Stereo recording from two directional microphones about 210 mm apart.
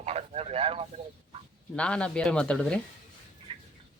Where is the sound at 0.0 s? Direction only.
30° right (ahead or behind).